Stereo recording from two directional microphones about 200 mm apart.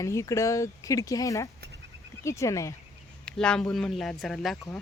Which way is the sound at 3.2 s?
5° left (ahead or behind).